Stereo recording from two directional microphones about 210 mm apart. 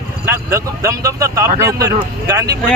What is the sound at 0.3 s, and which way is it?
Speech, 15° right (ahead or behind).